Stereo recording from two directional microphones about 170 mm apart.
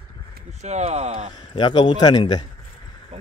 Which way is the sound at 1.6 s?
30° left (ahead or behind).